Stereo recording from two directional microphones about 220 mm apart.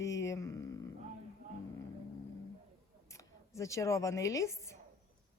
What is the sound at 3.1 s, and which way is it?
A woman's voice, 15° left (ahead or behind).